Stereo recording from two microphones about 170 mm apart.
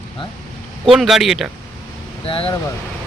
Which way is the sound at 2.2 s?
30° left (ahead or behind).